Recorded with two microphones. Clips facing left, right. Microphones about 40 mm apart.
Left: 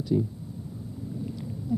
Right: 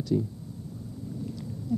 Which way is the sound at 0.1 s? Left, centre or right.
Centre.